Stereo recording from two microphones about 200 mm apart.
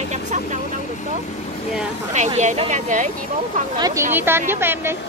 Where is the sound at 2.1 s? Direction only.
35° right (ahead or behind).